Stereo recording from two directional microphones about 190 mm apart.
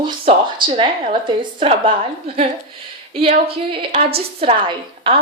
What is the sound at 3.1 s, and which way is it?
A woman's voice, 30° right (ahead or behind).